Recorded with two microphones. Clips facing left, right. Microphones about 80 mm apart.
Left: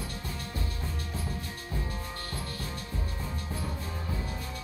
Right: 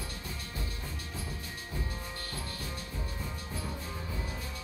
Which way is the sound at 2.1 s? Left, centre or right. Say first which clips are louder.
Left 3 dB; left.